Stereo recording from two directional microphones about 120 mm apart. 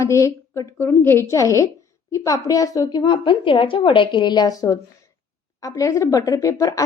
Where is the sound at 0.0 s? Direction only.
25° left (ahead or behind).